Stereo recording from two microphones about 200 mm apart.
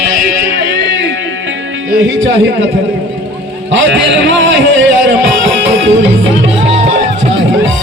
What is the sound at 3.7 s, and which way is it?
Speech, 65° right (ahead or behind).